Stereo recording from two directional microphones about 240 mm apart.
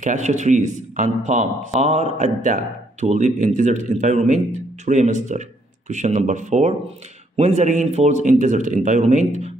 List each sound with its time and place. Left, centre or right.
0.0 s a man's voice: right